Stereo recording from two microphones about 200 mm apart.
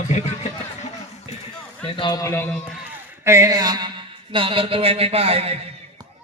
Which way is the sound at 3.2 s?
15° right (ahead or behind).